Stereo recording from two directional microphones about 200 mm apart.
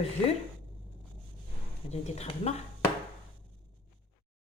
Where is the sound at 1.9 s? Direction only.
30° left (ahead or behind).